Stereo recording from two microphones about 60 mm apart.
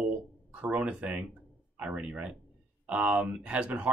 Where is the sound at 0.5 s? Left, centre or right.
Right.